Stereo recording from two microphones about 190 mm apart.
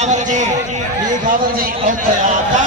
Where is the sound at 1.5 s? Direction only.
45° right (ahead or behind).